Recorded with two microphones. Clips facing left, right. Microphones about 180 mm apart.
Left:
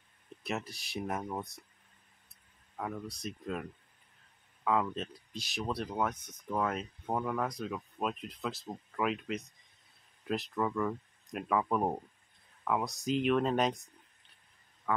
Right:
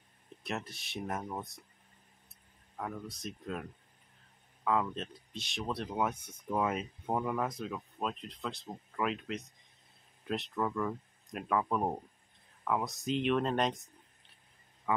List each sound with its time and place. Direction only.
0.4 s speech: centre (ahead or behind)
2.8 s speech: centre (ahead or behind)
4.6 s speech: centre (ahead or behind)
14.9 s speech: 5° right (ahead or behind)